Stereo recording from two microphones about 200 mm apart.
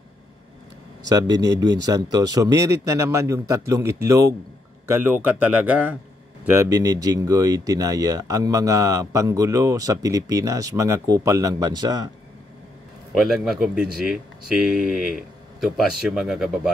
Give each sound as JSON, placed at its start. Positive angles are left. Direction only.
{"t": 1.0, "sound": "speech", "side_deg": -20}
{"t": 1.3, "sound": "speech", "side_deg": -60}
{"t": 1.9, "sound": "speech", "side_deg": -20}
{"t": 13.3, "sound": "speech", "side_deg": 0}